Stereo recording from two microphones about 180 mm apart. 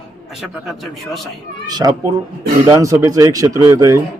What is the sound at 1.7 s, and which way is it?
A man's voice, 20° right (ahead or behind).